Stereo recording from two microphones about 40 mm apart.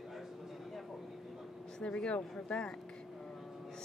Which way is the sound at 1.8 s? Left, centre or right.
Centre.